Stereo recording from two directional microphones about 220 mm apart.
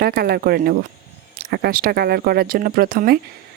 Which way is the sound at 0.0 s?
45° right (ahead or behind).